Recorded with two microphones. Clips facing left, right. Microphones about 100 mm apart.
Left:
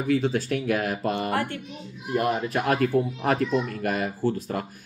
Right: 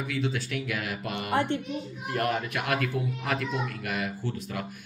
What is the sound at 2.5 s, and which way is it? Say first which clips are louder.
Speech: left 7 dB; 35° left (ahead or behind).